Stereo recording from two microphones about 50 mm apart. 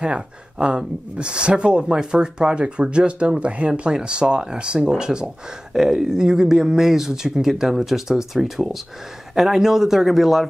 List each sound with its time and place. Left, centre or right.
0.0 s speech: right; by 10.5 s centre